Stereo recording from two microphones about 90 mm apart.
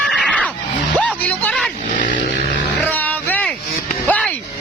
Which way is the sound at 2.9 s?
20° left (ahead or behind).